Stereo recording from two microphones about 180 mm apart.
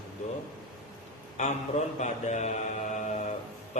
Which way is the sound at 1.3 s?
40° left (ahead or behind).